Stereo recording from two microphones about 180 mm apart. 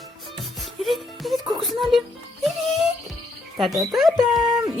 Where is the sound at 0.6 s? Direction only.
Centre (ahead or behind).